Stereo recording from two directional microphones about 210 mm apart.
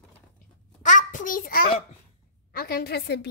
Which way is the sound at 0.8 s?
35° left (ahead or behind).